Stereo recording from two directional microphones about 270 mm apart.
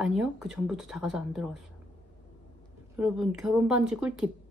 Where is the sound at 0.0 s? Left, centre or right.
Centre.